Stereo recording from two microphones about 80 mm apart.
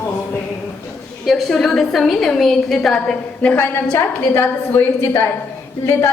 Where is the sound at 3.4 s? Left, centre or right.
Left.